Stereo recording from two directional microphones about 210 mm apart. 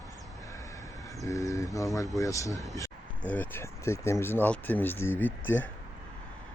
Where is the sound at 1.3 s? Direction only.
15° left (ahead or behind).